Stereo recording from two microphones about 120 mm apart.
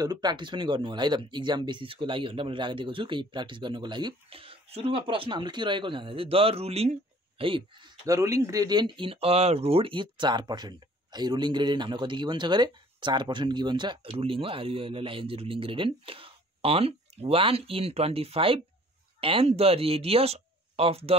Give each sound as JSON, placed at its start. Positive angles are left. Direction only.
{"t": 0.0, "sound": "speech", "side_deg": -35}
{"t": 8.1, "sound": "speech", "side_deg": -25}